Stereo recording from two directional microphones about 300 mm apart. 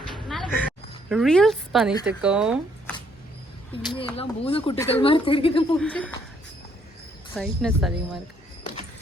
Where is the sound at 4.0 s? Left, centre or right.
Centre.